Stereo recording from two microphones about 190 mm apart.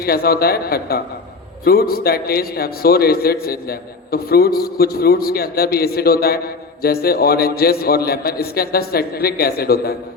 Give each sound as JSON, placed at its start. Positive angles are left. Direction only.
{"t": 0.0, "sound": "a man's voice", "side_deg": 55}